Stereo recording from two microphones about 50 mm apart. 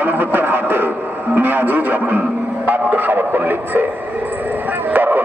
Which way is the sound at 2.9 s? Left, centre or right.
Right.